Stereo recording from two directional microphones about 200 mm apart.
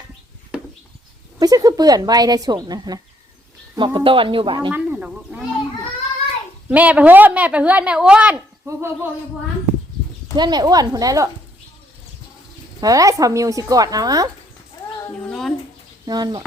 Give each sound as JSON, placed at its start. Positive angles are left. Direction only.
{"t": 1.4, "sound": "speech", "side_deg": -20}
{"t": 4.7, "sound": "bird", "side_deg": -5}
{"t": 6.7, "sound": "a woman's voice", "side_deg": -5}
{"t": 10.3, "sound": "speech", "side_deg": -20}
{"t": 12.8, "sound": "a woman's voice", "side_deg": -15}
{"t": 15.0, "sound": "cat", "side_deg": 5}
{"t": 16.0, "sound": "speech", "side_deg": -20}